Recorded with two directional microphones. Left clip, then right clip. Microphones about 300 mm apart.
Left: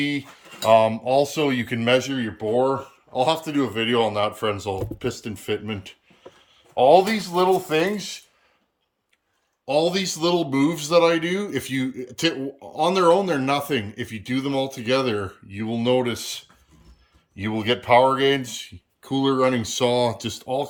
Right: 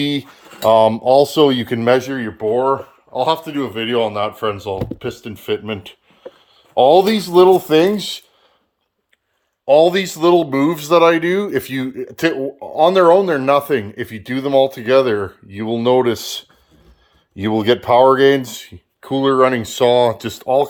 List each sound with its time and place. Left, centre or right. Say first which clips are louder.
0.0 s speech: right 5 dB; right
6.7 s speech: right 5 dB; right
9.6 s speech: right 10 dB; centre